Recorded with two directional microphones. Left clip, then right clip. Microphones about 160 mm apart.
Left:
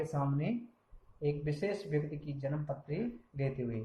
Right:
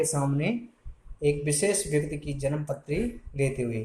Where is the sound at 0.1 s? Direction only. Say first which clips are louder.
Right 8 dB; 35° right (ahead or behind).